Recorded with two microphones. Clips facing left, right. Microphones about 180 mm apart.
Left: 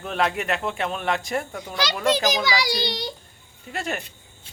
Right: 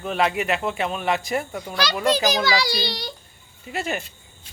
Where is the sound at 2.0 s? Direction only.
20° left (ahead or behind).